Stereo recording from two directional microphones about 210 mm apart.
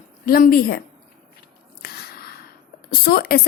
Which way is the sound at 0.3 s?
45° left (ahead or behind).